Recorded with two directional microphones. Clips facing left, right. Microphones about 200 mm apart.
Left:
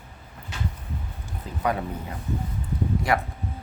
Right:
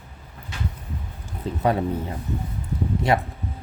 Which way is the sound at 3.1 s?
25° right (ahead or behind).